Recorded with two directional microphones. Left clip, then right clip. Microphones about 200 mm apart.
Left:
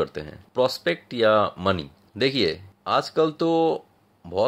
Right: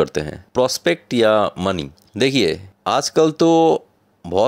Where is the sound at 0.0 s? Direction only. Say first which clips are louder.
Right 8 dB; 45° right (ahead or behind).